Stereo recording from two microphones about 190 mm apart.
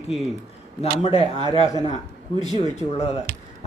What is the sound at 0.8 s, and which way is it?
A man's voice, 30° left (ahead or behind).